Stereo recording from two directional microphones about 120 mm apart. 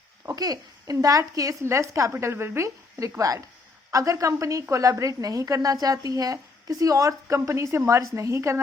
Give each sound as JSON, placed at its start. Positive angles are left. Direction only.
{"t": 0.3, "sound": "a woman's voice", "side_deg": -30}